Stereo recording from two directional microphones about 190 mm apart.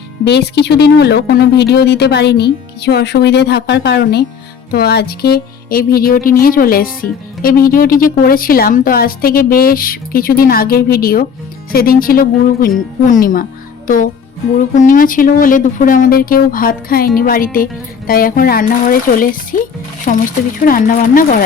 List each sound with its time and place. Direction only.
0.3 s speech: 60° left (ahead or behind)